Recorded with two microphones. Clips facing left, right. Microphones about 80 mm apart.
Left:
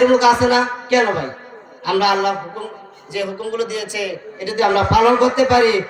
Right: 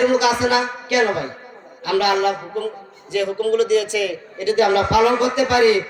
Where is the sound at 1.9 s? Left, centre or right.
Left.